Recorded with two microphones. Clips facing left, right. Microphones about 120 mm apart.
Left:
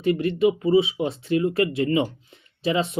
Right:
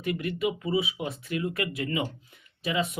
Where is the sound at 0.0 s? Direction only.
30° left (ahead or behind).